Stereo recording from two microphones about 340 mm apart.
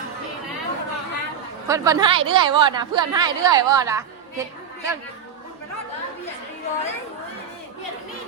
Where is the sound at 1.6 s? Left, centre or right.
Centre.